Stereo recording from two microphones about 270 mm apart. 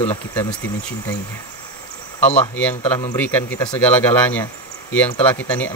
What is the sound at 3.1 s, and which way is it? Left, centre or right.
Speech, centre.